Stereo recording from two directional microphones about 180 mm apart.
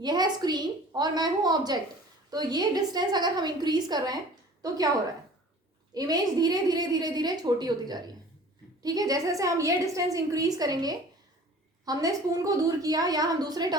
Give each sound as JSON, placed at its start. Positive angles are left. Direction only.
{"t": 0.0, "sound": "a woman's voice", "side_deg": -20}